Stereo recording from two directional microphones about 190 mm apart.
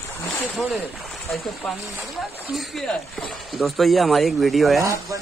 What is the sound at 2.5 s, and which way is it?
Speech, centre (ahead or behind).